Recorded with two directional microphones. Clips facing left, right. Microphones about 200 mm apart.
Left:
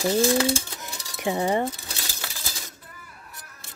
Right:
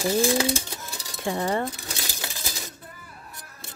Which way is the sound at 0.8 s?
15° left (ahead or behind).